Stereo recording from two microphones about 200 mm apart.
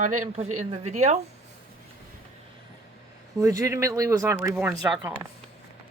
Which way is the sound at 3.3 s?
15° right (ahead or behind).